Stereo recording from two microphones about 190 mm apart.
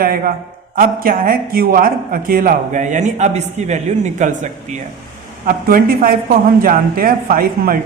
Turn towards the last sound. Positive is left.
turn(degrees=-50)  # may be behind; listen again after turning